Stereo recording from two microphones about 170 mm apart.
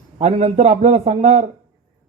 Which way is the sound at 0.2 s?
40° right (ahead or behind).